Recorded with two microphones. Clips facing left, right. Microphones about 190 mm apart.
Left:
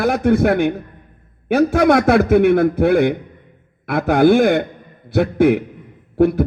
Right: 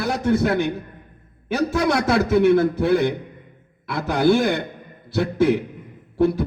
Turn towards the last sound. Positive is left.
turn(degrees=60)  # may be behind; listen again after turning